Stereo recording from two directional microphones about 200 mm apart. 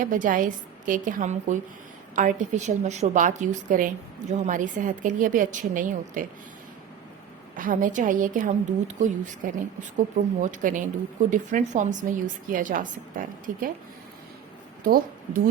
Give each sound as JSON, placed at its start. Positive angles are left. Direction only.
{"t": 0.0, "sound": "a woman's voice", "side_deg": -40}
{"t": 7.5, "sound": "a woman's voice", "side_deg": -40}
{"t": 14.8, "sound": "a woman's voice", "side_deg": -45}